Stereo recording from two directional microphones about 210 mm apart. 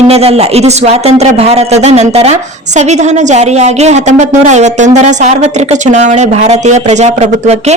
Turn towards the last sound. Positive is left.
turn(degrees=-30)  # may be behind; listen again after turning